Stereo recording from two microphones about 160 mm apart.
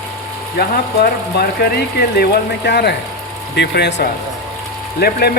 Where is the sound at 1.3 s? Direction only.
80° left.